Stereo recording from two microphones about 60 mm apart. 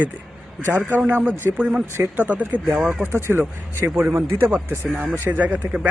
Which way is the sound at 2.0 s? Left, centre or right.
Right.